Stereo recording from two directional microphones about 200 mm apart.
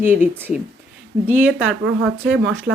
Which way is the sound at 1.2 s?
10° right (ahead or behind).